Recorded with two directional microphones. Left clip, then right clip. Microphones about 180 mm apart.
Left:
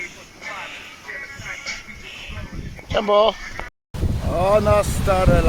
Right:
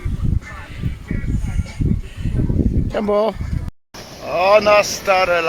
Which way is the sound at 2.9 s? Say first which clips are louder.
Left 2 dB; 40° right (ahead or behind).